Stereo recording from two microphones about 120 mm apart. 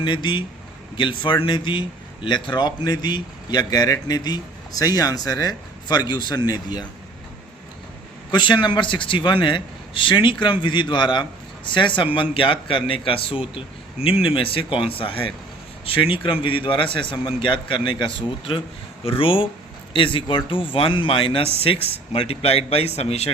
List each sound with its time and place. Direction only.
0.0 s a man's voice: 40° left (ahead or behind)
8.3 s a man's voice: 40° left (ahead or behind); by 23.3 s 60° left (ahead or behind)